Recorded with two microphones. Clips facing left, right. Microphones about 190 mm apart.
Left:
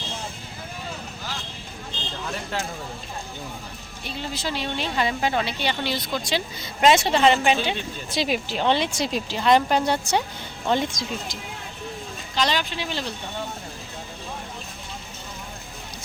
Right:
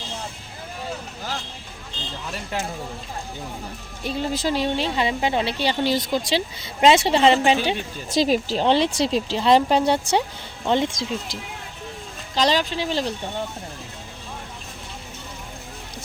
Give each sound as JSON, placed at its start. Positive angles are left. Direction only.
{"t": 4.0, "sound": "speech", "side_deg": -40}
{"t": 4.9, "sound": "speech", "side_deg": -25}